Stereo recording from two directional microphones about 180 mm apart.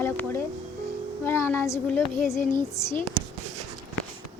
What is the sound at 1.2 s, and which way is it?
Speech, 15° left (ahead or behind).